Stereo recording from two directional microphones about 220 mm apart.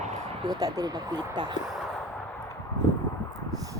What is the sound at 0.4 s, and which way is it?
Speech, 15° right (ahead or behind).